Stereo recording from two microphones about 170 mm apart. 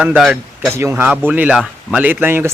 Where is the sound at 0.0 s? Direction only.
5° right (ahead or behind).